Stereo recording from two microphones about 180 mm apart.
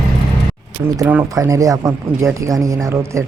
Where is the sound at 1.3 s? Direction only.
20° right (ahead or behind).